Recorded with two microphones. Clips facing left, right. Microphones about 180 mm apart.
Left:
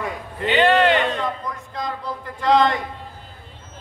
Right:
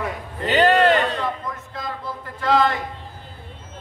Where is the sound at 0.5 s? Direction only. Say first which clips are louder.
Even; 40° right (ahead or behind).